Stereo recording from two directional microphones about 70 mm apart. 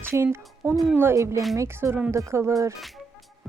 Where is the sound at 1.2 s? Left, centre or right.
Right.